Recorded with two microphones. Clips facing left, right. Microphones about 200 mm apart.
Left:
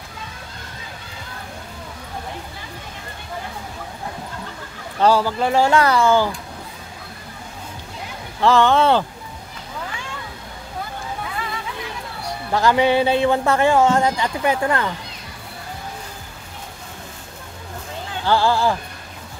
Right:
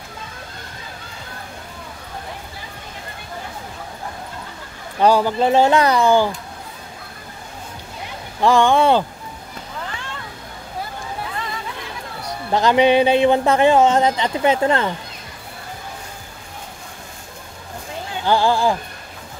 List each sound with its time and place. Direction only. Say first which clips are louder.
5.0 s speech: right 2 dB; 15° right (ahead or behind)
8.4 s speech: right 1 dB; 15° right (ahead or behind)
12.5 s speech: right 2 dB; 20° right (ahead or behind)
18.2 s speech: right 1 dB; 15° right (ahead or behind)